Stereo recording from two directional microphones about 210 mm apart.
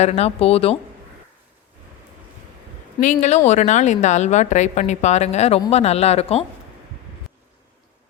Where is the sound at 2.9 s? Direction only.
35° left (ahead or behind).